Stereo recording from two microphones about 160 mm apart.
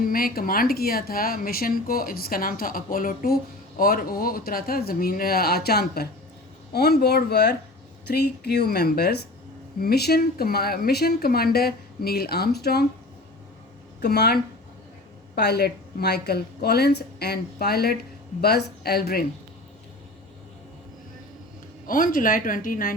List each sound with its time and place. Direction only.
0.0 s a woman's voice: 65° left (ahead or behind); by 12.8 s 85° left
14.0 s a woman's voice: 85° left
15.4 s a woman's voice: 85° left
21.8 s speech: 60° left (ahead or behind)